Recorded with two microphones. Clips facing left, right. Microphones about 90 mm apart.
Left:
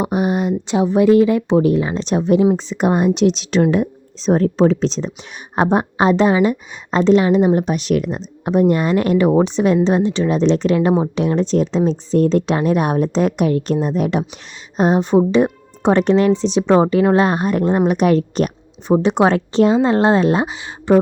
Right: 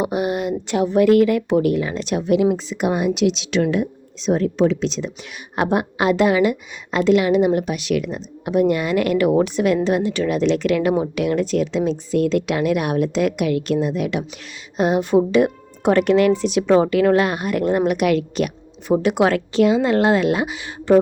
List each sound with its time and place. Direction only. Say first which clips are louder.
0.0 s speech: left 3 dB; 25° left (ahead or behind)
18.9 s speech: left 3 dB; 25° left (ahead or behind)
20.9 s speech: left 1 dB; 20° left (ahead or behind)